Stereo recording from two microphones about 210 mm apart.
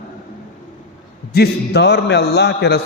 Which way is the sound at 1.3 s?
50° left (ahead or behind).